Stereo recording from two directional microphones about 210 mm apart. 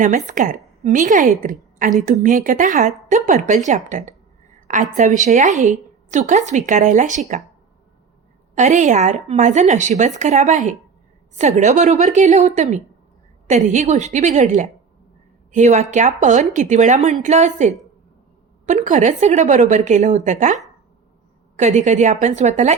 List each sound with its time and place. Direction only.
0.3 s a woman's voice: 35° right (ahead or behind)
8.5 s a woman's voice: 35° right (ahead or behind)